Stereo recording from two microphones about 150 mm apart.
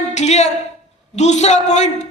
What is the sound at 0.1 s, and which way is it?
A woman's voice, 50° left (ahead or behind).